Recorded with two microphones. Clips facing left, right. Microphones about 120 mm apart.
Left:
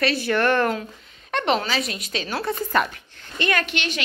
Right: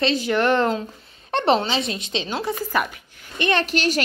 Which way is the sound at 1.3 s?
30° right (ahead or behind).